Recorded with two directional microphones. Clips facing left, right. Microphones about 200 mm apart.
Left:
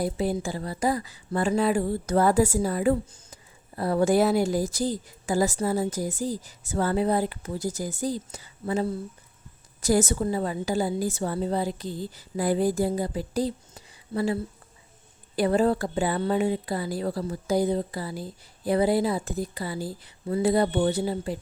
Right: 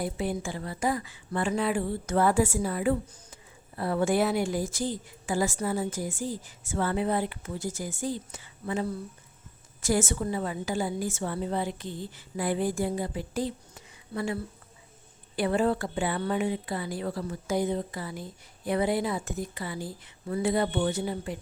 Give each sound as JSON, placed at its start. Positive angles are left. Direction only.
{"t": 0.0, "sound": "speech", "side_deg": 35}
{"t": 15.4, "sound": "speech", "side_deg": 40}